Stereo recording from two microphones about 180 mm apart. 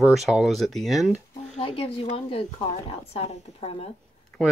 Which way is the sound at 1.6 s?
30° left (ahead or behind).